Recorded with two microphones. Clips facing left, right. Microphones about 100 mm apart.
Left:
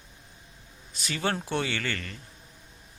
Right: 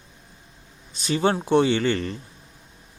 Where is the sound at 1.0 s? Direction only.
25° right (ahead or behind).